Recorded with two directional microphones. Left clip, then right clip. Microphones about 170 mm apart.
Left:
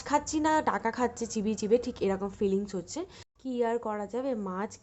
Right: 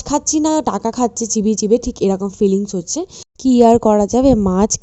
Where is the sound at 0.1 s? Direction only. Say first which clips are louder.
Right 10 dB; 45° right (ahead or behind).